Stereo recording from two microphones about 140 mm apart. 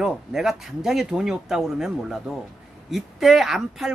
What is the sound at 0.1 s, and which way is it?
Speech, 5° right (ahead or behind).